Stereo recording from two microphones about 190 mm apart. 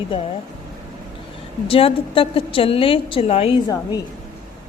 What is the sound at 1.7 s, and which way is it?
A woman's voice, 30° left (ahead or behind).